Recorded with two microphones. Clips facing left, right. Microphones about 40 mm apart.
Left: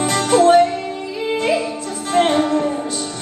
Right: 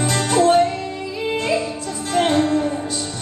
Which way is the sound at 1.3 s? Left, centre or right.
Left.